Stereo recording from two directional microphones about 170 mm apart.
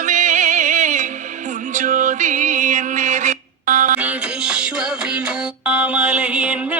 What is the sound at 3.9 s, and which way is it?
Music, 5° right (ahead or behind).